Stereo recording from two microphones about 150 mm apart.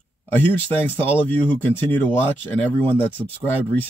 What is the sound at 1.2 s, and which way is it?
Speech, 10° left (ahead or behind).